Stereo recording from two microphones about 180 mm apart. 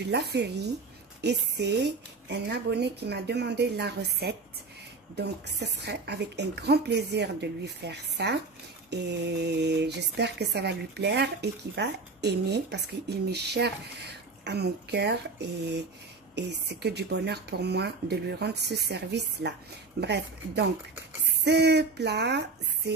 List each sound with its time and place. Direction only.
0.0 s speech: 70° right (ahead or behind)